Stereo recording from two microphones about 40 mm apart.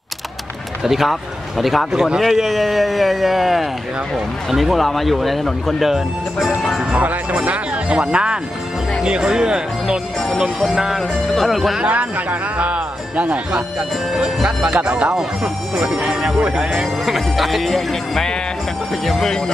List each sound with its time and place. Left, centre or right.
0.8 s speech: centre
6.9 s speech: right
11.0 s speech: centre
11.9 s speech: right
14.1 s speech: centre
14.6 s speech: right
15.1 s speech: centre
16.3 s speech: right
17.0 s speech: centre